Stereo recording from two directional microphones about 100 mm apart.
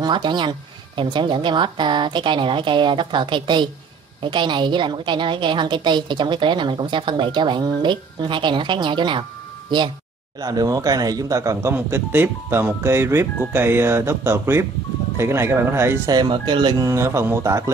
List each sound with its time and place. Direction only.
0.0 s a woman's voice: 50° right (ahead or behind)
10.4 s a man's voice: 40° right (ahead or behind)
11.7 s speech: 20° right (ahead or behind)
16.3 s a woman's voice: 55° right (ahead or behind)
16.8 s a man's voice: 30° right (ahead or behind)